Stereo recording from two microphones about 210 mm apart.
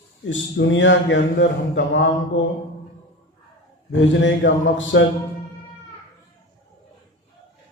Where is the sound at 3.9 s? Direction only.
60° left (ahead or behind).